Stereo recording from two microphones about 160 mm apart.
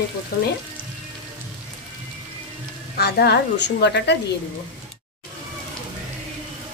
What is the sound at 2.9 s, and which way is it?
A woman's voice, 90° left.